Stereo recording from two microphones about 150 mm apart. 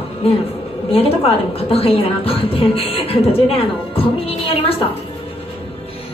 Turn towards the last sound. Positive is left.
turn(degrees=40)  # may be behind; listen again after turning